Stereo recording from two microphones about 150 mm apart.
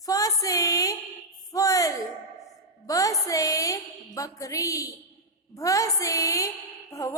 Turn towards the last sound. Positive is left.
turn(degrees=20)  # may be behind; listen again after turning